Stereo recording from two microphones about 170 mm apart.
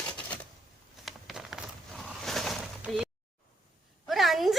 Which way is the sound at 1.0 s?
Centre (ahead or behind).